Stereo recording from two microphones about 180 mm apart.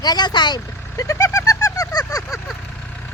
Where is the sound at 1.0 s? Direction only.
15° left (ahead or behind).